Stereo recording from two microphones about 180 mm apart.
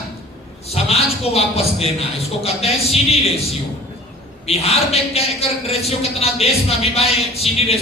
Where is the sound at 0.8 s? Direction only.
35° left (ahead or behind).